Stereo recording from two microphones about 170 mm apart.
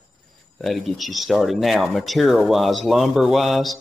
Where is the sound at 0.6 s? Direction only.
Centre (ahead or behind).